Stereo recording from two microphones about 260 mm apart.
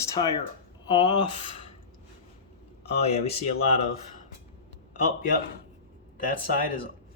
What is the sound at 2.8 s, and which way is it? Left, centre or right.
Speech, left.